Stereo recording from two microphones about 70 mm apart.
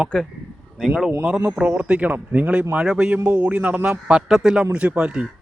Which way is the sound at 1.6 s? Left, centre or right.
Centre.